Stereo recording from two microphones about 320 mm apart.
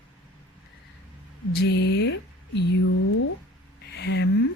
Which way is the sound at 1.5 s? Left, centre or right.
Left.